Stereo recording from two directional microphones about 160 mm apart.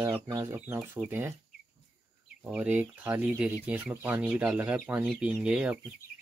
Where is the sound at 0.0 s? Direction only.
15° right (ahead or behind).